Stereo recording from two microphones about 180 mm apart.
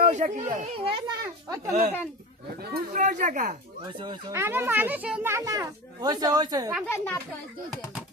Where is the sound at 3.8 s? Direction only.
25° right (ahead or behind).